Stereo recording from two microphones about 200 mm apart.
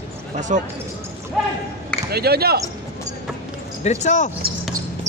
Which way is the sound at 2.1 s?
50° right (ahead or behind).